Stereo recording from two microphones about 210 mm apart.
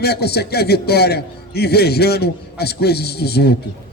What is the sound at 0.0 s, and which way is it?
A man's voice, 50° left (ahead or behind).